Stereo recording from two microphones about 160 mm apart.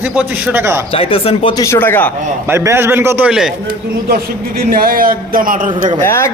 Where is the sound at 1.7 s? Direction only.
15° left (ahead or behind).